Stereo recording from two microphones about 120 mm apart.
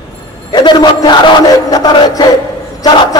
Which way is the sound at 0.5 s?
40° left (ahead or behind).